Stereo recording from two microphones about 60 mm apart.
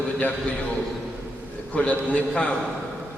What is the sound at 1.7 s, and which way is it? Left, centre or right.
Speech, left.